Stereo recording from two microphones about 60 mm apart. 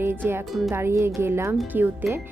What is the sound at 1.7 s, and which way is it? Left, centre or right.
Speech, right.